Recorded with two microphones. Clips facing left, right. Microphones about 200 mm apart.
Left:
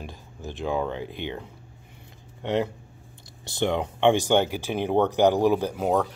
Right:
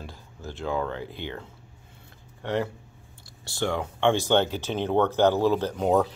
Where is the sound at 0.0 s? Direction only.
15° left (ahead or behind).